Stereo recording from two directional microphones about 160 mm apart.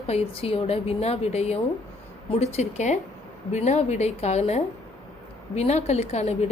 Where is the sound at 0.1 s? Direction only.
40° left (ahead or behind).